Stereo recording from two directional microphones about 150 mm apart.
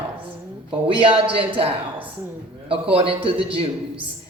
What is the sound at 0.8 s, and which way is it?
Speech, 35° right (ahead or behind).